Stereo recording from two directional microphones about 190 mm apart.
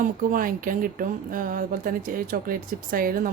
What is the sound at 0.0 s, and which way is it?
Speech, 45° right (ahead or behind).